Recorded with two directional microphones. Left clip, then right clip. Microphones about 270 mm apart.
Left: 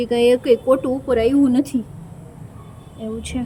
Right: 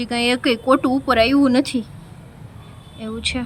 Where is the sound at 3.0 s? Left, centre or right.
Right.